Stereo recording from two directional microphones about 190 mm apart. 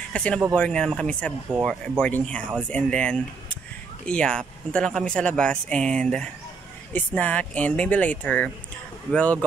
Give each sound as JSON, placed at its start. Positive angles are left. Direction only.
{"t": 0.1, "sound": "speech", "side_deg": 5}